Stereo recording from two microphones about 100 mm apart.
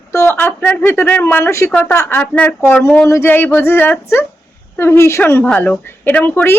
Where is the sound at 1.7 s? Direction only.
15° left (ahead or behind).